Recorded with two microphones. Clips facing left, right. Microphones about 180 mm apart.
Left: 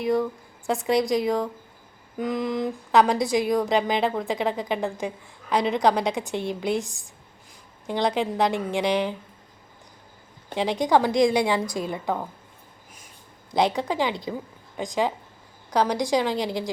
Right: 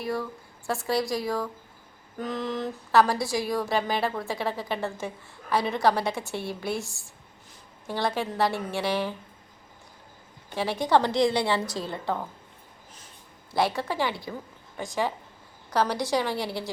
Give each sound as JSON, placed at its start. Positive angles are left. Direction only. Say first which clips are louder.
{"t": 0.0, "sound": "a woman's voice", "louder": "left 7 dB", "side_deg": 20}
{"t": 10.5, "sound": "a woman's voice", "louder": "left 2 dB", "side_deg": 15}
{"t": 13.5, "sound": "a woman's voice", "louder": "left 3 dB", "side_deg": 20}